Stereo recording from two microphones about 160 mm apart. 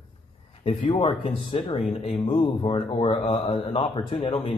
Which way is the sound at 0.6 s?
35° left (ahead or behind).